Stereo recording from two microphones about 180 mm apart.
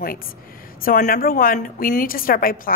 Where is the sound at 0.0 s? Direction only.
55° left (ahead or behind).